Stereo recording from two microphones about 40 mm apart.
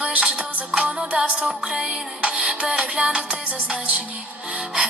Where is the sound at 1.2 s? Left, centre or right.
Right.